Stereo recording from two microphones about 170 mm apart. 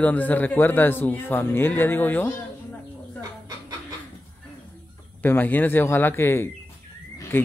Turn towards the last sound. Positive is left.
turn(degrees=15)  # may be behind; listen again after turning